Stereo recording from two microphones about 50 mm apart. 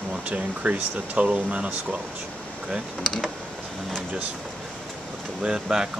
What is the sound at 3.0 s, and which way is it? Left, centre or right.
Speech, centre.